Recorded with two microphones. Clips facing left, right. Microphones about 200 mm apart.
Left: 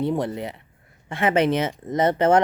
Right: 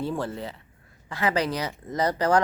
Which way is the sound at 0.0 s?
20° left (ahead or behind).